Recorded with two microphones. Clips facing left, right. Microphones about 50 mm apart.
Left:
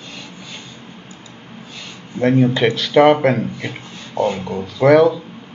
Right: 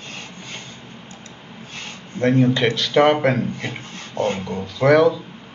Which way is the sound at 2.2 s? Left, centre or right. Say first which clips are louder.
Left 2 dB; centre.